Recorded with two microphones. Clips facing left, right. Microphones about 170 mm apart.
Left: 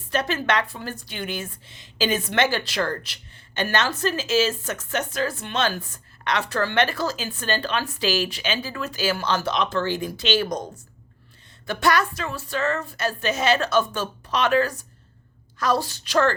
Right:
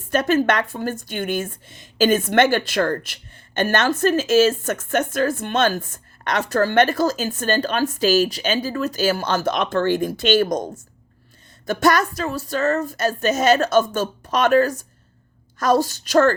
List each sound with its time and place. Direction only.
0.1 s a woman's voice: 45° right (ahead or behind)
11.6 s a woman's voice: 45° right (ahead or behind)